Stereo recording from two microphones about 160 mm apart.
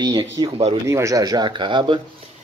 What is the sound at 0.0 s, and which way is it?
Speech, 25° right (ahead or behind).